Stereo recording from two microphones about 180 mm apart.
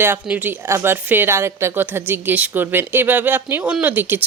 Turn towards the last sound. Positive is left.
turn(degrees=-10)  # may be behind; listen again after turning